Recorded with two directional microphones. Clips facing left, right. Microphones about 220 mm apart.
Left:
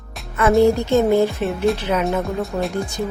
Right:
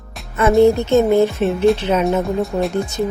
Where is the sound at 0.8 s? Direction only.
20° right (ahead or behind).